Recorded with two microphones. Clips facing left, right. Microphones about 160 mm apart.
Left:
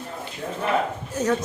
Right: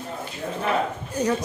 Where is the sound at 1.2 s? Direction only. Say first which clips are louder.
Left 1 dB; centre (ahead or behind).